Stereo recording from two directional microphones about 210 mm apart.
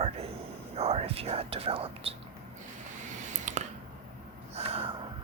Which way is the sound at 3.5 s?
35° right (ahead or behind).